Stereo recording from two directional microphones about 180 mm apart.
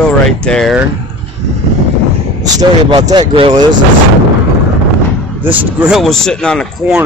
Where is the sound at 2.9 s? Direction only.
25° right (ahead or behind).